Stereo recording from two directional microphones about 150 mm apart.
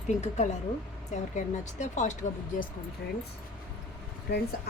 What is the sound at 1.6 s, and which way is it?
Speech, 50° left (ahead or behind).